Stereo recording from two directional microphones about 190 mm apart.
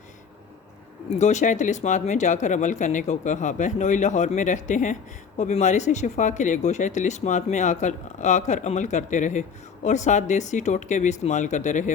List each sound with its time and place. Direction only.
1.2 s speech: 40° left (ahead or behind)